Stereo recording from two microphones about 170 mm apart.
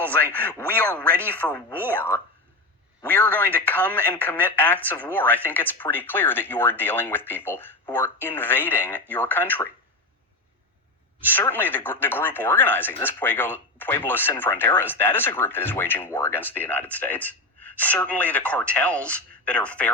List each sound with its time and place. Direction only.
0.0 s a sound: 10° left (ahead or behind)
0.3 s speech: 10° left (ahead or behind)
11.3 s speech: 10° left (ahead or behind)